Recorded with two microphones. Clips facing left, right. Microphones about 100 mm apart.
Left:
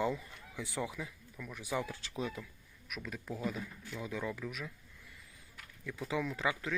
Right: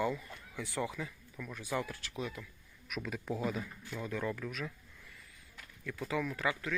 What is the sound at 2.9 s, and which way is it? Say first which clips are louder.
Speech: right 4 dB; centre (ahead or behind).